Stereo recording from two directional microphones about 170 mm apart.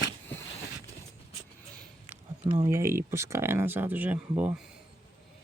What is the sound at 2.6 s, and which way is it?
Speech, 15° right (ahead or behind).